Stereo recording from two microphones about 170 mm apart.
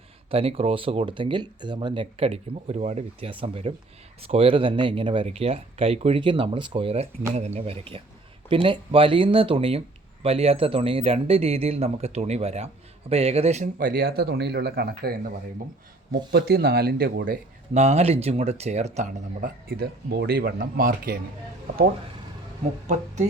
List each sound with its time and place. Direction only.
0.3 s speech: 35° right (ahead or behind)
13.7 s speech: 60° right (ahead or behind)
16.3 s speech: 65° right (ahead or behind)
17.7 s speech: 40° right (ahead or behind)
19.6 s speech: 65° right (ahead or behind)